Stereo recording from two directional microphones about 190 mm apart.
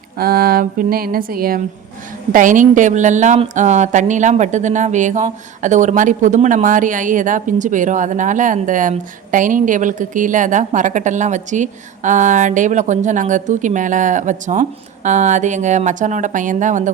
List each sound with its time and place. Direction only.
0.2 s speech: 50° right (ahead or behind)